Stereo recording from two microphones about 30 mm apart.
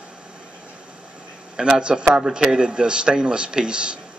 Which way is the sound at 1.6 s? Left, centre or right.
Right.